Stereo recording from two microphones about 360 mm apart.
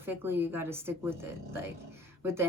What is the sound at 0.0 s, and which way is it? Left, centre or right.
A woman's voice, centre.